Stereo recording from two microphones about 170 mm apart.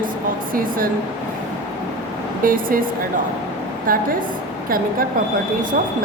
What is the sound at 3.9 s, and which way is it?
Speech, 55° right (ahead or behind).